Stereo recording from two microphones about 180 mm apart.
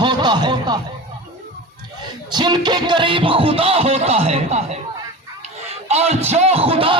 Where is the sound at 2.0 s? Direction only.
25° right (ahead or behind).